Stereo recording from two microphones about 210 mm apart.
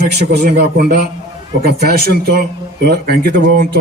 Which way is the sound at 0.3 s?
40° right (ahead or behind).